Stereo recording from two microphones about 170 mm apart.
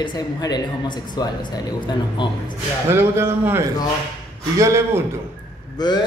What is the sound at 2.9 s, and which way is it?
Speech, 15° right (ahead or behind).